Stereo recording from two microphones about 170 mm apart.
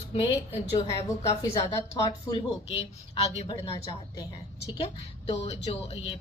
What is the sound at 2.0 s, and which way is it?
Speech, 30° left (ahead or behind).